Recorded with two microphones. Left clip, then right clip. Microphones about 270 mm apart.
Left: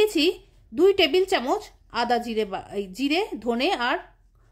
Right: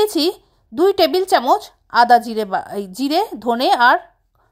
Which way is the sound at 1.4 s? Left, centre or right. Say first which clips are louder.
Right 10 dB; right.